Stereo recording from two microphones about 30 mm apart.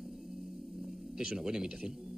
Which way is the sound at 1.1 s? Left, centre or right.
Right.